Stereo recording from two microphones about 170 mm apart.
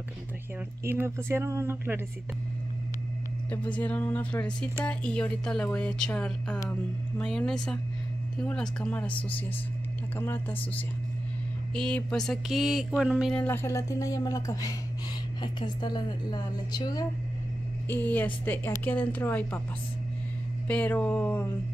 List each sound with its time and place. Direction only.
0.8 s speech: 15° right (ahead or behind)
3.4 s a woman's voice: 10° left (ahead or behind)
10.1 s a woman's voice: 15° left (ahead or behind)
11.7 s speech: 5° left (ahead or behind); by 17.0 s 25° left (ahead or behind)
17.8 s a woman's voice: 10° left (ahead or behind)
20.6 s a woman's voice: 10° left (ahead or behind)